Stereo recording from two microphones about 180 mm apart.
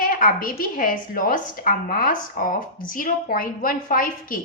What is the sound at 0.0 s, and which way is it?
A woman's voice, 50° left (ahead or behind).